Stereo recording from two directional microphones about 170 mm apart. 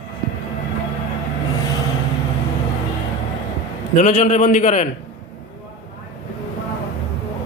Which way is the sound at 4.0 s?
40° left (ahead or behind).